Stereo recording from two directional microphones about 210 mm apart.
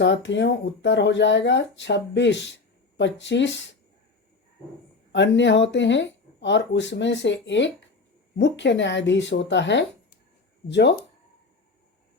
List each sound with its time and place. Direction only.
0.0 s speech: 60° left (ahead or behind)
5.1 s speech: 55° left (ahead or behind)